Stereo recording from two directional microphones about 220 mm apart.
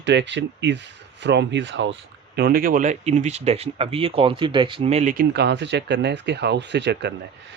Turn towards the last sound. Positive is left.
turn(degrees=-50)  # may be behind; listen again after turning